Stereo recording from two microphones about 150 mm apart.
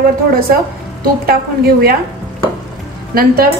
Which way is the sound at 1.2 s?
85° right.